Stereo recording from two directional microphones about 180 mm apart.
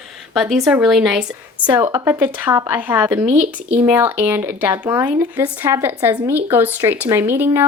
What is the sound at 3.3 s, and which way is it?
Speech, 45° right (ahead or behind).